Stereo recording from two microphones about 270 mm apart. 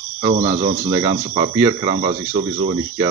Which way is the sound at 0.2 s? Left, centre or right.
Right.